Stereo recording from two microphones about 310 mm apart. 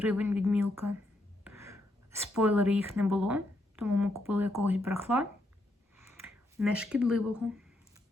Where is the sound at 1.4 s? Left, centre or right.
Centre.